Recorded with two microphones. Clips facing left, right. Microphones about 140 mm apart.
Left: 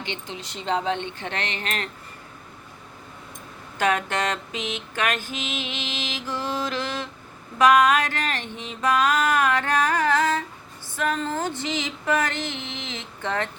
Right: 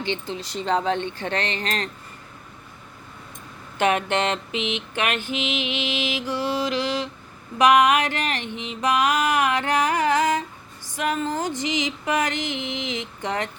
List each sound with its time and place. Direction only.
0.0 s speech: 35° right (ahead or behind)
3.8 s mantra: 25° right (ahead or behind)